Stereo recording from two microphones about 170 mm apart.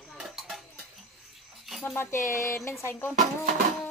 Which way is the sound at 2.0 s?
15° left (ahead or behind).